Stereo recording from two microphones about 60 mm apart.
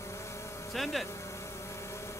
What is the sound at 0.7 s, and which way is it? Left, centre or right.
Speech, centre.